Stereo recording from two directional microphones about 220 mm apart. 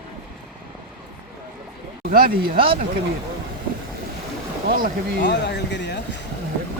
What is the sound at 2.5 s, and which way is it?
Speech, 25° right (ahead or behind).